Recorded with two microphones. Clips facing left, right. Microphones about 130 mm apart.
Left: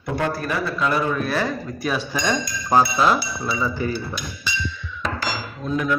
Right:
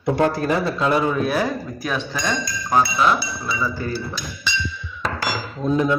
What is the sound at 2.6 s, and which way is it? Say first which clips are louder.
Music: left 1 dB; 30° left (ahead or behind).